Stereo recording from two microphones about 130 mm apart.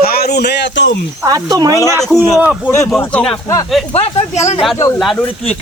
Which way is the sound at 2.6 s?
20° left (ahead or behind).